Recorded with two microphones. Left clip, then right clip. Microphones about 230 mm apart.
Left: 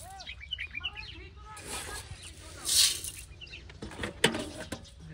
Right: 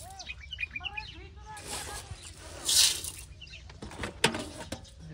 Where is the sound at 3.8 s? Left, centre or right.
Centre.